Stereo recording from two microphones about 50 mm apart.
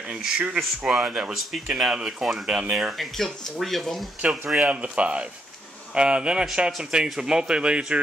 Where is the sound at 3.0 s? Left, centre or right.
Centre.